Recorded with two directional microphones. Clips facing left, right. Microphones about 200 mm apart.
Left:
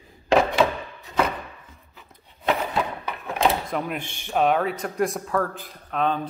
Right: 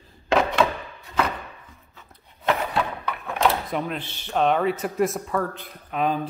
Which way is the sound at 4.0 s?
15° left (ahead or behind).